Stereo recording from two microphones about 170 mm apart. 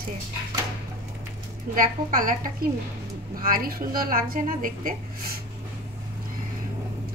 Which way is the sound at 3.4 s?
55° right (ahead or behind).